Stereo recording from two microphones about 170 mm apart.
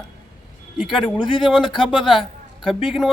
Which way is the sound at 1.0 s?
25° left (ahead or behind).